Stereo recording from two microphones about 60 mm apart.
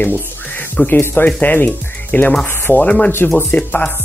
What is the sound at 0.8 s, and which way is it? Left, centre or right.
Speech, left.